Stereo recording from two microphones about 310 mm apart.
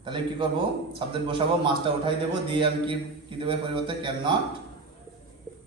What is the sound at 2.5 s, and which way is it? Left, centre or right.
A man's voice, centre.